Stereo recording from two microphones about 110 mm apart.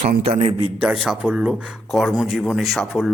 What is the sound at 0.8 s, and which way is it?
Speech, 5° right (ahead or behind).